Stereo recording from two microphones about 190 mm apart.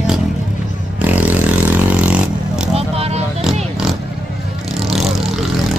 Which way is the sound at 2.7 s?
30° right (ahead or behind).